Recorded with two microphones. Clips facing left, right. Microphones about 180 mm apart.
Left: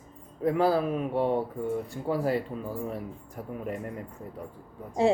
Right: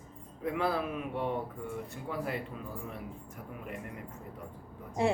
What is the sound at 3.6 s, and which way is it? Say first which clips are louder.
Speech: left 8 dB; 40° left (ahead or behind).